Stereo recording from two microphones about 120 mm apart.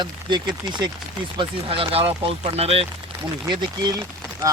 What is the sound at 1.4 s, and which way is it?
Speech, 50° right (ahead or behind).